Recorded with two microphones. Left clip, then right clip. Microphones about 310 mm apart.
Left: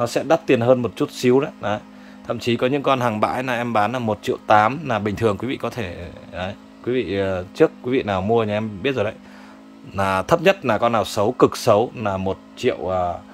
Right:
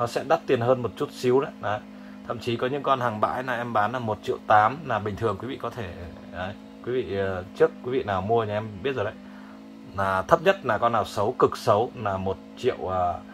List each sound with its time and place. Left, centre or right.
0.0 s a man's voice: left